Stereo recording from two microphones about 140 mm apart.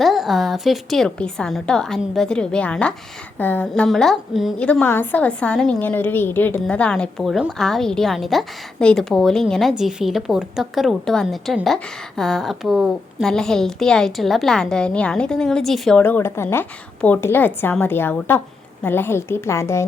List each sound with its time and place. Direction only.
0.0 s a woman's voice: centre (ahead or behind)
4.7 s a woman's voice: 15° left (ahead or behind)
16.0 s a woman's voice: 15° left (ahead or behind)